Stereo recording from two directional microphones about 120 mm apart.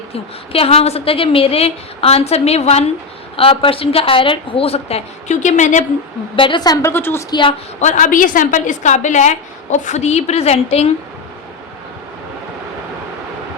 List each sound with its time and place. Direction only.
0.1 s a woman's voice: 55° left (ahead or behind)
3.3 s a woman's voice: 50° left (ahead or behind); by 5.8 s 90° left
6.3 s a woman's voice: 45° left (ahead or behind)
6.8 s a woman's voice: 20° left (ahead or behind)
7.3 s a woman's voice: 40° left (ahead or behind)
7.8 s a woman's voice: 85° left; by 10.9 s 60° left (ahead or behind)